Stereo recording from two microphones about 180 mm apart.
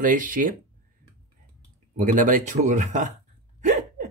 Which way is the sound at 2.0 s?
45° right (ahead or behind).